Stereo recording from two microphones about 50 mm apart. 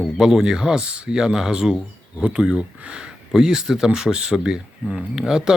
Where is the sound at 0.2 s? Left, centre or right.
Centre.